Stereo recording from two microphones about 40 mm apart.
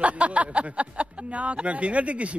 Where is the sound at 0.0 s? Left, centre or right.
Right.